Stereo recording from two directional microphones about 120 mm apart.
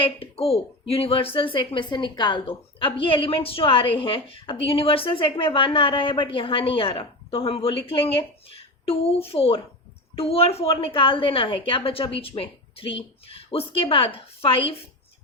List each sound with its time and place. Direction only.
0.0 s speech: 50° left (ahead or behind)